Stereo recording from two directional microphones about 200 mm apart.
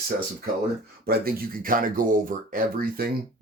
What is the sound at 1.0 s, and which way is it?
Speech, 50° right (ahead or behind).